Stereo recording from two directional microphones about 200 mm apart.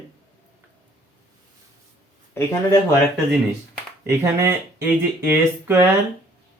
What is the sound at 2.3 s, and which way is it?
Speech, 15° left (ahead or behind).